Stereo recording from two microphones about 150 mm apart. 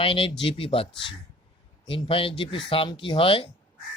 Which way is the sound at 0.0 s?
40° left (ahead or behind).